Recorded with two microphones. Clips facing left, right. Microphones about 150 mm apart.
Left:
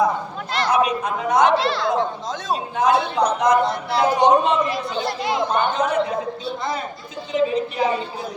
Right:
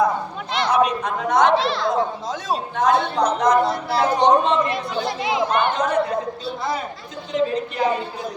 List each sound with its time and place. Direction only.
0.5 s speech: centre (ahead or behind)
5.5 s speech: 80° right
5.7 s speech: 5° left (ahead or behind)
7.3 s speech: 5° left (ahead or behind)